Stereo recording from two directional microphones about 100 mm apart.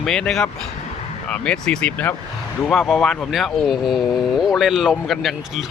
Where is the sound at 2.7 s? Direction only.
Centre (ahead or behind).